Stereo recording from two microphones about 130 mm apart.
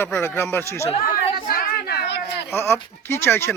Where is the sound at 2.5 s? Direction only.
20° left (ahead or behind).